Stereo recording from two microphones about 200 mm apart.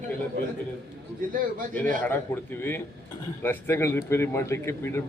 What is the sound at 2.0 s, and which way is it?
A man's voice, 10° left (ahead or behind).